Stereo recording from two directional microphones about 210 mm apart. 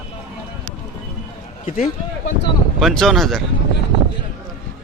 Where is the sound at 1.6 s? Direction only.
35° left (ahead or behind).